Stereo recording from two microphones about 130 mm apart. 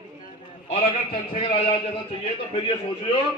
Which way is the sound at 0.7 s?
50° left (ahead or behind).